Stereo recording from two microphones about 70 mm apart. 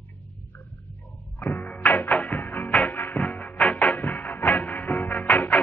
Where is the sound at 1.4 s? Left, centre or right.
Left.